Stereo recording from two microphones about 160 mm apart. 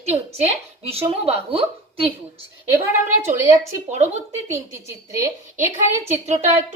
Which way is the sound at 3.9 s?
45° right (ahead or behind).